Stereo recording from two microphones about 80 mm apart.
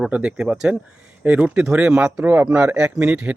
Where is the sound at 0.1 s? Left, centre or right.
Centre.